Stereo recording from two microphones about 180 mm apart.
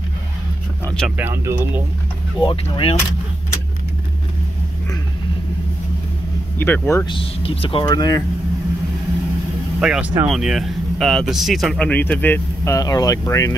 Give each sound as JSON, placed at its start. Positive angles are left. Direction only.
{"t": 0.8, "sound": "speech", "side_deg": 5}
{"t": 1.1, "sound": "speech", "side_deg": -15}
{"t": 2.4, "sound": "speech", "side_deg": 30}
{"t": 6.6, "sound": "speech", "side_deg": 10}
{"t": 7.1, "sound": "speech", "side_deg": 30}
{"t": 9.8, "sound": "speech", "side_deg": -5}